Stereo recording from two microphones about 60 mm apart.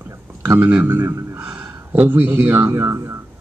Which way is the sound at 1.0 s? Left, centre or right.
Right.